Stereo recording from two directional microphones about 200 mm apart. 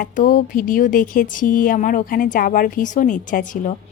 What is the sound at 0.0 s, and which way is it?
A woman's voice, 45° left (ahead or behind).